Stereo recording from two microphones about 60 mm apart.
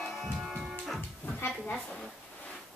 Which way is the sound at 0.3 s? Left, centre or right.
Centre.